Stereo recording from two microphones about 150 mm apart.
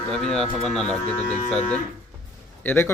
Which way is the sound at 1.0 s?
45° left (ahead or behind).